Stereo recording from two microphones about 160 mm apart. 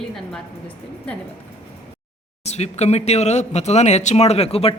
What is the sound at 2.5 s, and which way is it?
Speech, 45° left (ahead or behind).